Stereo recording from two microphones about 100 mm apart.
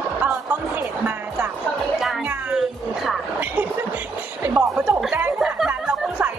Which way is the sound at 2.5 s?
Centre (ahead or behind).